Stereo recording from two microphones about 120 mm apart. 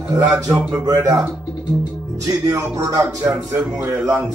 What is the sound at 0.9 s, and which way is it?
Speech, 30° right (ahead or behind).